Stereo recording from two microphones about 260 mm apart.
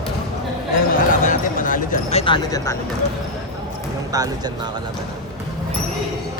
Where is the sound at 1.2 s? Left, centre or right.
Left; by 2.7 s centre.